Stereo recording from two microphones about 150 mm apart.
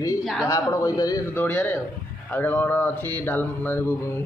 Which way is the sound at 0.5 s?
20° left (ahead or behind).